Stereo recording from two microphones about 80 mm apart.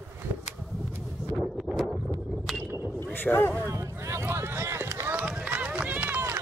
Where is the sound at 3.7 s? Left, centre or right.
Right.